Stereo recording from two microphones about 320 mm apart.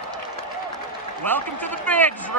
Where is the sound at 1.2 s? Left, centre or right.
Centre.